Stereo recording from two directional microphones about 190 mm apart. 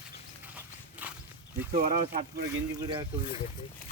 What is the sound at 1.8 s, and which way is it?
Speech, 45° right (ahead or behind).